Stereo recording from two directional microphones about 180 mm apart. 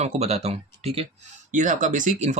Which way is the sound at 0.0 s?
35° right (ahead or behind).